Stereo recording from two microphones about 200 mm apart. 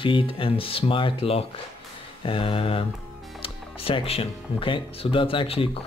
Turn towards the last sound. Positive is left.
turn(degrees=30)  # may be behind; listen again after turning